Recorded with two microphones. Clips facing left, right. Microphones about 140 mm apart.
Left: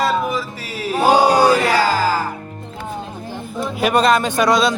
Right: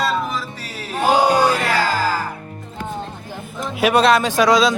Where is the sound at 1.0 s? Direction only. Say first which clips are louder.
Left 2 dB; 40° left (ahead or behind).